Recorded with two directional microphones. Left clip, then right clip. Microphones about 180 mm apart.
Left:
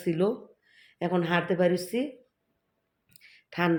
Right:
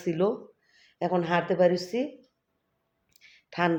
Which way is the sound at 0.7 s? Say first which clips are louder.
Right 1 dB; 15° left (ahead or behind).